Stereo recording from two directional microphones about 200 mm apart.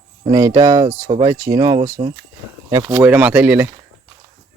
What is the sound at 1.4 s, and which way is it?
Speech, 15° right (ahead or behind).